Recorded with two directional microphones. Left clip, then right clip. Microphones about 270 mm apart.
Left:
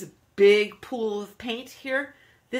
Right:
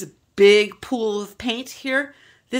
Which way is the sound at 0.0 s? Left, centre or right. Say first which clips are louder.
Right 4 dB; right.